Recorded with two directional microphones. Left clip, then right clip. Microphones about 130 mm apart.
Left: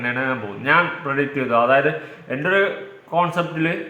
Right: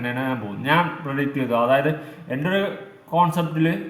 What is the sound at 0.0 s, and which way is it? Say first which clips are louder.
A man's voice: left 4 dB; 20° right (ahead or behind).